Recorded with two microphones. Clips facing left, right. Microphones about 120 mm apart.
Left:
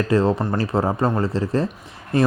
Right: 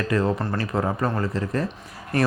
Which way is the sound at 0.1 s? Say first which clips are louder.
Left 3 dB; 30° left (ahead or behind).